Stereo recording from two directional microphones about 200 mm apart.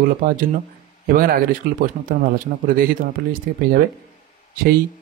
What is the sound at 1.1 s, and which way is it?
Speech, 50° right (ahead or behind).